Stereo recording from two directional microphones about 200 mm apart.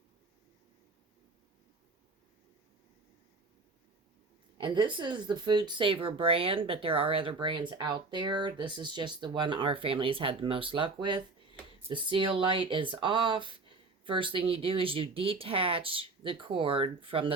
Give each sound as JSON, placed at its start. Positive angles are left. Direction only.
{"t": 4.6, "sound": "speech", "side_deg": -20}